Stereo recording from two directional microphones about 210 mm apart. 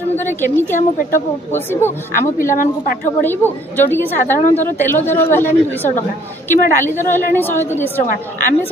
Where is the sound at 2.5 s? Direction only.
40° left (ahead or behind).